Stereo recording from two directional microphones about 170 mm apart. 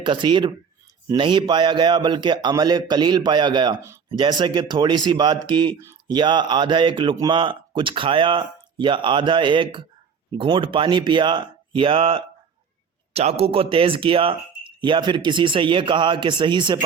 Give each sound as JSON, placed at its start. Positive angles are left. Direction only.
{"t": 0.0, "sound": "speech", "side_deg": -30}